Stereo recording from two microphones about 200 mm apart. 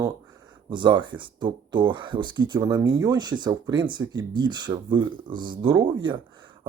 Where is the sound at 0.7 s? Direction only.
25° right (ahead or behind).